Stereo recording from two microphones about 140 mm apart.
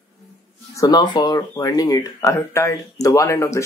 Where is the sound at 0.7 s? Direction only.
25° left (ahead or behind).